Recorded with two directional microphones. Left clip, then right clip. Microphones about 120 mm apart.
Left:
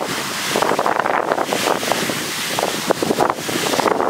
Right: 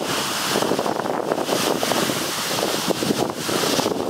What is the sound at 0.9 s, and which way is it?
Wind noise, 35° left (ahead or behind).